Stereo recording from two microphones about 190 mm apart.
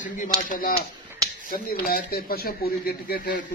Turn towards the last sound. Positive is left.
turn(degrees=55)  # may be behind; listen again after turning